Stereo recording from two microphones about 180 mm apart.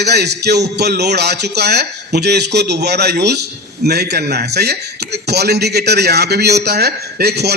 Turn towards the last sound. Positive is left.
turn(degrees=-65)  # may be behind; listen again after turning